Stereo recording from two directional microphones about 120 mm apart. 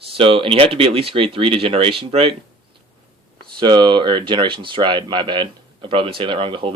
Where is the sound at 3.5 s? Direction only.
40° right (ahead or behind).